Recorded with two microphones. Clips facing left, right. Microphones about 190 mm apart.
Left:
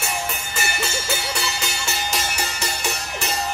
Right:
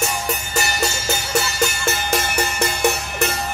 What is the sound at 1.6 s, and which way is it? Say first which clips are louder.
Cowbell: right 7 dB; 55° right (ahead or behind).